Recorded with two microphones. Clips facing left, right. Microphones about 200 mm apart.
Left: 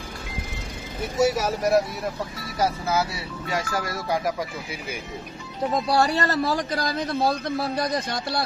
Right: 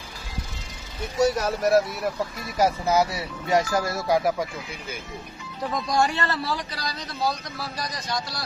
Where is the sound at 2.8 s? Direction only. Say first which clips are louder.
Right 3 dB; 20° right (ahead or behind).